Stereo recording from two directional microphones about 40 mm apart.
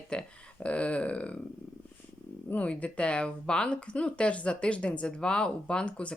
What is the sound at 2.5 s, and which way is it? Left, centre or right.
Speech, left.